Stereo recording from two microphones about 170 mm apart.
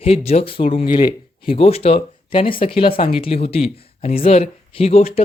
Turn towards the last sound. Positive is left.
turn(degrees=35)  # may be behind; listen again after turning